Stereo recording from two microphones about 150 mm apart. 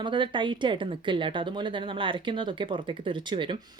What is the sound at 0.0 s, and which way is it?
Speech, 30° right (ahead or behind).